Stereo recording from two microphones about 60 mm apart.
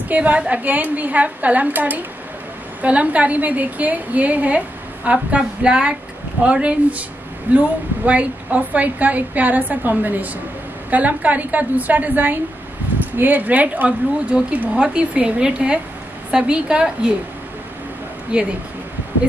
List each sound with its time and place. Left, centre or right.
0.1 s a woman's voice: right
18.3 s a woman's voice: centre